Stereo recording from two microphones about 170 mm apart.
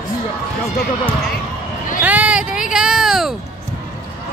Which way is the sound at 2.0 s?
10° right (ahead or behind).